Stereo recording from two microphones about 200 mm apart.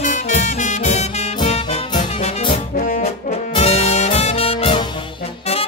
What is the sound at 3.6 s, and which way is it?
Music, 30° left (ahead or behind).